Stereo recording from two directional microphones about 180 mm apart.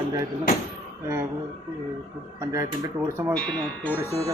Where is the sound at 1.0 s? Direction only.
15° right (ahead or behind).